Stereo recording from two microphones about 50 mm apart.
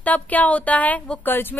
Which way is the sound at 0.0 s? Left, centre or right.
Left.